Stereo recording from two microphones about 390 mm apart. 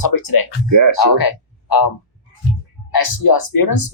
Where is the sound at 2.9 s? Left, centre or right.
Left.